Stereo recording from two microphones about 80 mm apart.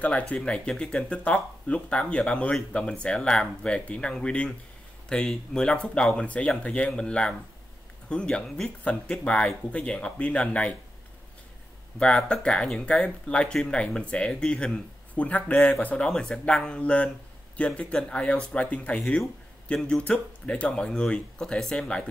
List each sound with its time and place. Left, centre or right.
0.0 s speech: centre
12.0 s speech: centre